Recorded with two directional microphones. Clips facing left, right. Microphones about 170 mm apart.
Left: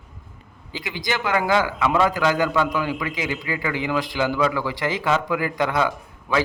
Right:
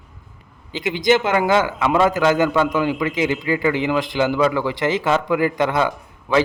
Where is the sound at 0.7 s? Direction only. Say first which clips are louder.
Right 10 dB; 20° right (ahead or behind).